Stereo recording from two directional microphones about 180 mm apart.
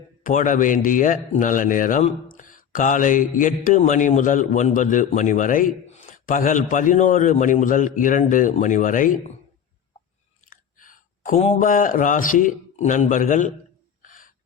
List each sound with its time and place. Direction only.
0.2 s a man's voice: 45° left (ahead or behind)
10.5 s speech: 50° left (ahead or behind)
14.0 s gasp: 50° left (ahead or behind)